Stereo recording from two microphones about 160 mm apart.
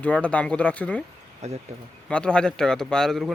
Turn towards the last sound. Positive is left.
turn(degrees=0)  # may be behind; listen again after turning